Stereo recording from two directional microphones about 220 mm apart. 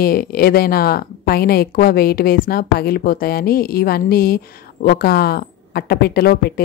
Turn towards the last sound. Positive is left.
turn(degrees=45)  # may be behind; listen again after turning